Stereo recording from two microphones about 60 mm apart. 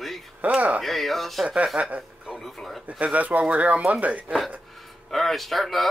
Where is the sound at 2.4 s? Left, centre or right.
Centre.